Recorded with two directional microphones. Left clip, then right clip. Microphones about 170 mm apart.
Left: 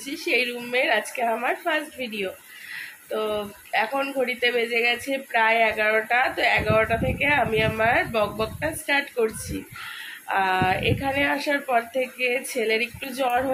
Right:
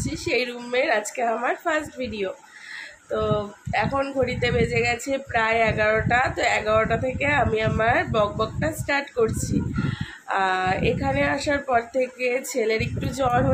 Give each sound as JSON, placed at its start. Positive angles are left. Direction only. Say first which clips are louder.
{"t": 0.0, "sound": "a man's voice", "louder": "left 1 dB", "side_deg": -10}